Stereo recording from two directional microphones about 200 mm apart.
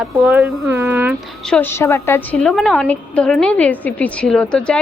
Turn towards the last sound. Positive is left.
turn(degrees=5)  # may be behind; listen again after turning